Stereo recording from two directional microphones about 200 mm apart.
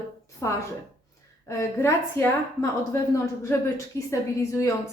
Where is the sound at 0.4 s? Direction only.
15° left (ahead or behind).